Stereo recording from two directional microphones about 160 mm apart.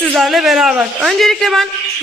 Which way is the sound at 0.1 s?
Centre (ahead or behind).